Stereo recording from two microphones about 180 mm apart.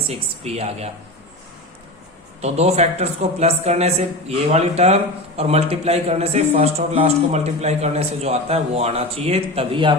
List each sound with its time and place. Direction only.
0.1 s a man's voice: 35° right (ahead or behind)
2.4 s a man's voice: 35° right (ahead or behind)